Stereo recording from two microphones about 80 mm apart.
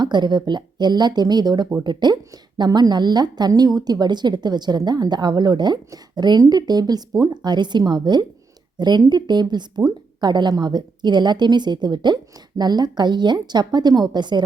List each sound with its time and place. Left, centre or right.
0.0 s a woman's voice: right